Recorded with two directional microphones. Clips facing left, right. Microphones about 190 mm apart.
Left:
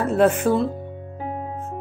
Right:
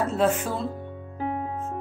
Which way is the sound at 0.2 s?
60° left (ahead or behind).